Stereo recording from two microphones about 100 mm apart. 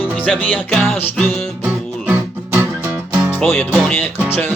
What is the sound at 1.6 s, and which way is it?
Music, 15° right (ahead or behind).